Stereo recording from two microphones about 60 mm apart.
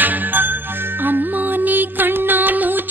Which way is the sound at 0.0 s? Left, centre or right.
Right.